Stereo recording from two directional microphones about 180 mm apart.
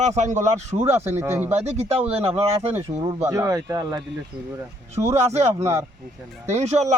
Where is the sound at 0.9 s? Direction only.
10° right (ahead or behind).